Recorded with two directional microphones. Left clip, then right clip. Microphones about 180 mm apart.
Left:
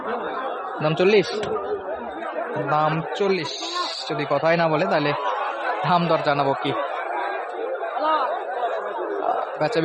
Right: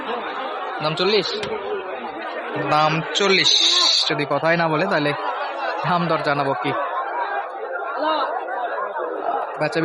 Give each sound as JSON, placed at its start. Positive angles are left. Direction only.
{"t": 0.9, "sound": "speech", "side_deg": 50}
{"t": 2.6, "sound": "a man's voice", "side_deg": 10}